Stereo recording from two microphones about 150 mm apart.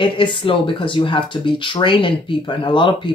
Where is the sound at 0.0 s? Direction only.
35° left (ahead or behind).